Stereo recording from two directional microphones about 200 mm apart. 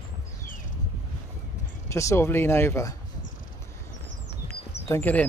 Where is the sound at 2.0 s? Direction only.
15° left (ahead or behind).